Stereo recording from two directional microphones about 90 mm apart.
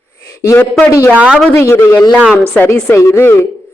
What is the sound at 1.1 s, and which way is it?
Speech, 15° right (ahead or behind).